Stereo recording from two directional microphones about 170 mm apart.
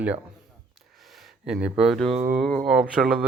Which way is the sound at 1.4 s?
5° right (ahead or behind).